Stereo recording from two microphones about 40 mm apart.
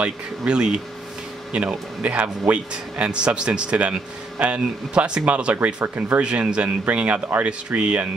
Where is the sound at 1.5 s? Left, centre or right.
Right.